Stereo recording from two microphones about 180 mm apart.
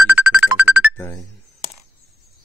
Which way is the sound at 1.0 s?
15° left (ahead or behind).